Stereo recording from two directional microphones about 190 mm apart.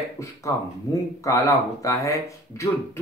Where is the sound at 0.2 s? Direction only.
15° left (ahead or behind).